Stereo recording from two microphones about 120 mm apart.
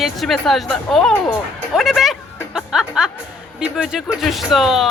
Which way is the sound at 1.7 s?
Centre (ahead or behind).